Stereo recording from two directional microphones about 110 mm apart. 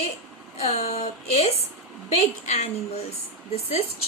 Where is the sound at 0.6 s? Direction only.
80° left.